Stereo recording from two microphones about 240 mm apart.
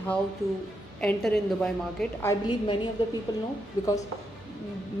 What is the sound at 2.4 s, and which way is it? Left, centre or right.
Speech, centre.